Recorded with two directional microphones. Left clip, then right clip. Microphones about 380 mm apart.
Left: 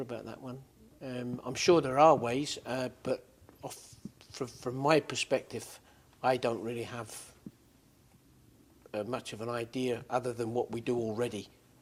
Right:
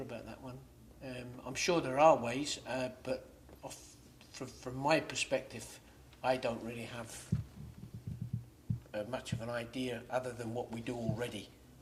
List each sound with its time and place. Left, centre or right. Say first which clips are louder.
0.1 s speech: left 5 dB; centre
3.6 s a sound: left 4 dB; left
4.3 s speech: left 7 dB; left
8.9 s speech: left 4 dB; centre